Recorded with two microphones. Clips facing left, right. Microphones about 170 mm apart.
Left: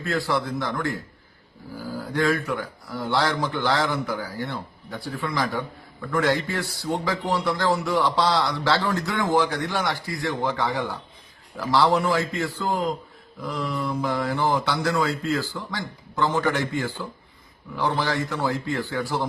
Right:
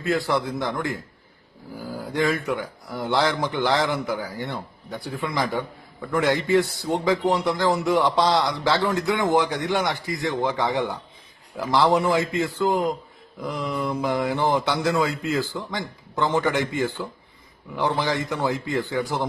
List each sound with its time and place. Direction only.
0.0 s a man's voice: 20° right (ahead or behind)
2.1 s a man's voice: 20° right (ahead or behind)